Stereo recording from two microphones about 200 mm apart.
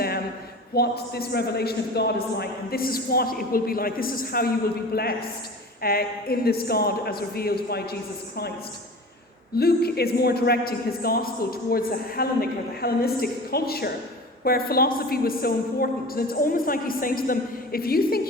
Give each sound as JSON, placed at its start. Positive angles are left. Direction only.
{"t": 0.7, "sound": "a man's voice", "side_deg": 50}
{"t": 9.6, "sound": "a man's voice", "side_deg": 50}